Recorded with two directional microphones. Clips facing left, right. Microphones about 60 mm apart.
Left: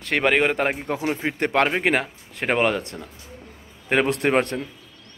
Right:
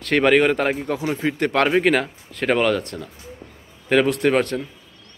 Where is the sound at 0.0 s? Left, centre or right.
Centre; by 4.6 s left.